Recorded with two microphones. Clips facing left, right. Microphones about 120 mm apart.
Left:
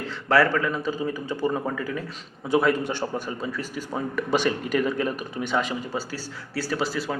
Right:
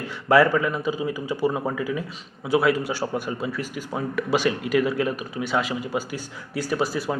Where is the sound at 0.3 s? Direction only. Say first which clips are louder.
Right 3 dB; 15° right (ahead or behind).